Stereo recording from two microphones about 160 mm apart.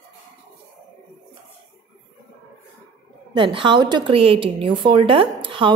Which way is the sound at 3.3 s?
30° right (ahead or behind).